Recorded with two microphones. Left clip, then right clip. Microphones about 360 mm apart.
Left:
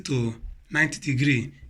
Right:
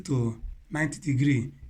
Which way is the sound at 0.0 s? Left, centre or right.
Right.